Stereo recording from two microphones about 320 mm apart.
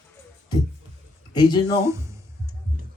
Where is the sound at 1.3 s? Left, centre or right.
Centre.